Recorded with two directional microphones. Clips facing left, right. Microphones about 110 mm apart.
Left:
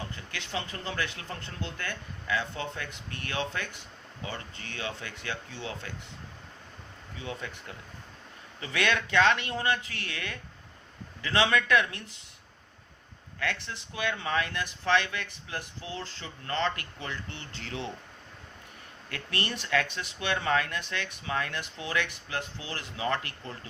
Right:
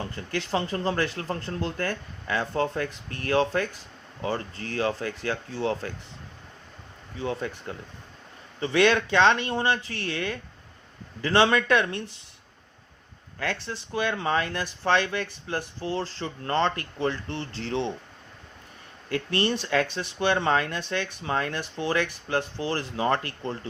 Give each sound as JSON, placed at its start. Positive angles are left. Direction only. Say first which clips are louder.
{"t": 0.3, "sound": "speech", "louder": "right 10 dB", "side_deg": -40}
{"t": 7.2, "sound": "speech", "louder": "right 8 dB", "side_deg": -35}
{"t": 13.4, "sound": "speech", "louder": "right 3 dB", "side_deg": -35}
{"t": 19.0, "sound": "speech", "louder": "right 9 dB", "side_deg": -30}